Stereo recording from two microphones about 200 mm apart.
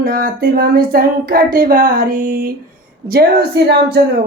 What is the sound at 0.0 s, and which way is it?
A woman's voice, 45° right (ahead or behind).